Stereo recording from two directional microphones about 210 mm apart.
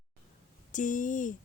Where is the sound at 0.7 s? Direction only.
35° left (ahead or behind).